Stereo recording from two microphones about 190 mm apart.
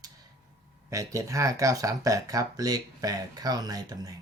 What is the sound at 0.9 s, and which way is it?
Speech, 15° right (ahead or behind).